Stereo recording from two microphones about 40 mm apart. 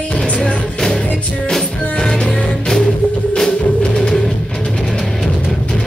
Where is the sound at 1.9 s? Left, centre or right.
Centre.